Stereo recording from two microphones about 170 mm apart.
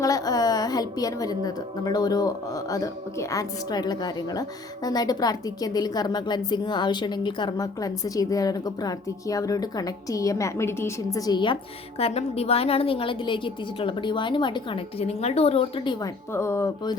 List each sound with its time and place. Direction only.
0.0 s a woman's voice: 20° left (ahead or behind)
11.9 s a woman's voice: 35° left (ahead or behind)